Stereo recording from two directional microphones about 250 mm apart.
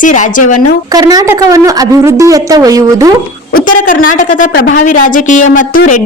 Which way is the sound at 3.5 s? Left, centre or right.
Left.